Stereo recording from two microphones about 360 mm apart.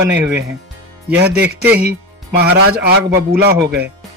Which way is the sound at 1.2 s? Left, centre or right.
Right.